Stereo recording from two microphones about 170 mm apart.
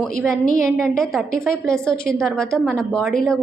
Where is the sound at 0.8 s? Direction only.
5° left (ahead or behind).